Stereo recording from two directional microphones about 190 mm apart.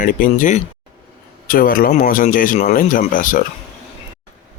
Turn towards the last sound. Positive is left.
turn(degrees=45)  # may be behind; listen again after turning